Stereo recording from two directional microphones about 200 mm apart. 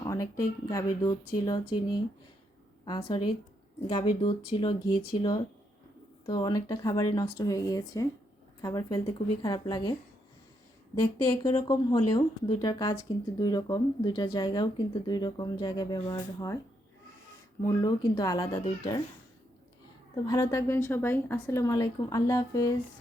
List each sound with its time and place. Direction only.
0.0 s a woman's voice: 15° left (ahead or behind)
11.4 s speech: 20° left (ahead or behind)
17.7 s speech: 20° left (ahead or behind)
20.2 s a woman's voice: 15° left (ahead or behind)